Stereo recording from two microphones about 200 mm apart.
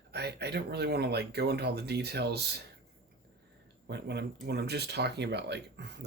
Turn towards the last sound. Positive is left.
turn(degrees=-55)  # may be behind; listen again after turning